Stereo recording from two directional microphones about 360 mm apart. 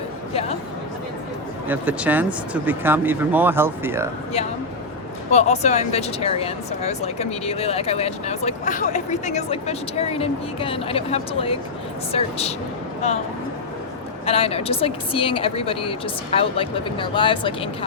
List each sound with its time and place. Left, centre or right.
1.6 s speech: centre
5.3 s speech: centre
14.3 s speech: centre